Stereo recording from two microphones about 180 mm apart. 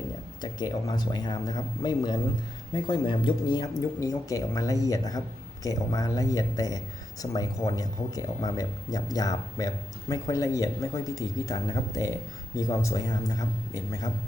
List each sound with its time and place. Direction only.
0.4 s speech: 20° left (ahead or behind)